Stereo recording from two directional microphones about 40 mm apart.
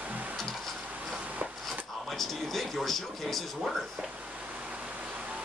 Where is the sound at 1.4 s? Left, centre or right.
Right.